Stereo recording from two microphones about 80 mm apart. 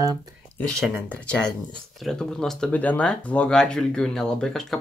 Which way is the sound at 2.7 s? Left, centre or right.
Left.